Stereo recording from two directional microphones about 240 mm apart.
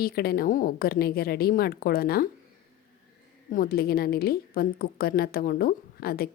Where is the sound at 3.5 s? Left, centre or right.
Left.